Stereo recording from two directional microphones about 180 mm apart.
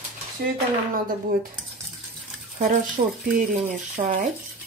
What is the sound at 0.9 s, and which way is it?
Speech, 50° right (ahead or behind).